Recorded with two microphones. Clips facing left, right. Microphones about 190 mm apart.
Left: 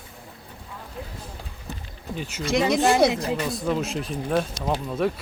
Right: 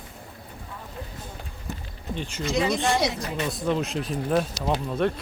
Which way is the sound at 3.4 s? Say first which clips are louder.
Even; centre (ahead or behind).